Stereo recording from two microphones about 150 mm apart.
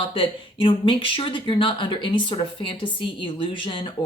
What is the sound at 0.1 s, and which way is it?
Speech, 35° left (ahead or behind).